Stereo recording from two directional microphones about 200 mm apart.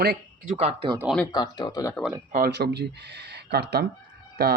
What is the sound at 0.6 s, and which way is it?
Speech, 25° right (ahead or behind).